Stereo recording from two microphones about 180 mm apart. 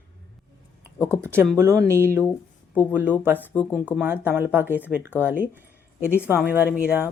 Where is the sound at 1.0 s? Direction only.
15° right (ahead or behind).